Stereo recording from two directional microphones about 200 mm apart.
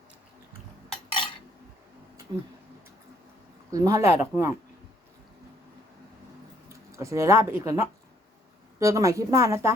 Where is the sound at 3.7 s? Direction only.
15° right (ahead or behind).